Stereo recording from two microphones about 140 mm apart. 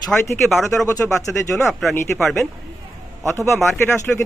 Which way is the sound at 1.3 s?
10° left (ahead or behind).